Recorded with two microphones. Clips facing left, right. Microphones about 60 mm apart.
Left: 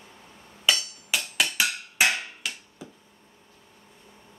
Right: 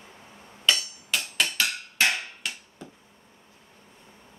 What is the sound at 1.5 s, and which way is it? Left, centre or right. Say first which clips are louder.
Percussion: left 1 dB; centre.